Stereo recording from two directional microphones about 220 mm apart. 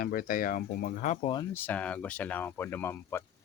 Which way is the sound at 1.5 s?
10° left (ahead or behind).